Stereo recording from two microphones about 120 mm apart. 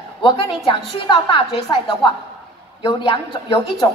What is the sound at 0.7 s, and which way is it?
A woman's voice, 45° left (ahead or behind).